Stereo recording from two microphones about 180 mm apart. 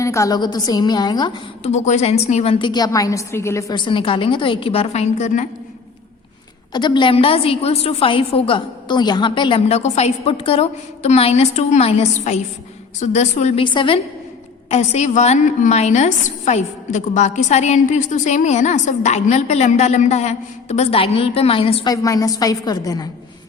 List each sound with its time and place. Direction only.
0.0 s a woman's voice: 15° left (ahead or behind)
1.6 s a woman's voice: 40° left (ahead or behind)
6.7 s a woman's voice: 25° left (ahead or behind)
22.0 s a woman's voice: 20° left (ahead or behind)